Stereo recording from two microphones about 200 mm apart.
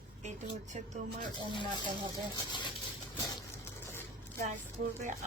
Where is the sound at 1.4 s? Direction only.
25° left (ahead or behind).